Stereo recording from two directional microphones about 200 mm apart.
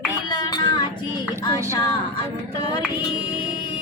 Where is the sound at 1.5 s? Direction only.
15° right (ahead or behind).